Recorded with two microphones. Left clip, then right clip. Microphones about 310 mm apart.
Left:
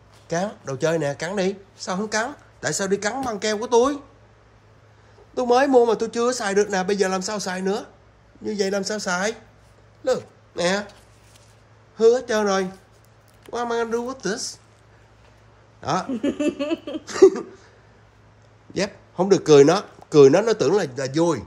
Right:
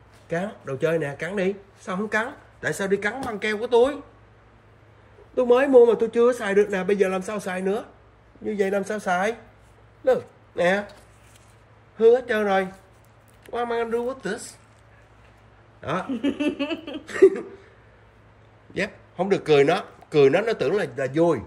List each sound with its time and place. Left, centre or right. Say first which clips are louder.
0.3 s speech: left 2 dB; centre
5.3 s speech: even; centre
12.0 s speech: even; centre
15.8 s speech: left 4 dB; centre
16.1 s a sound: left 2 dB; left
17.1 s speech: left 2 dB; centre
18.7 s speech: left 2 dB; centre